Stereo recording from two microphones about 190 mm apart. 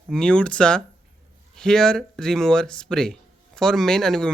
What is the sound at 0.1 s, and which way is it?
Speech, 5° left (ahead or behind).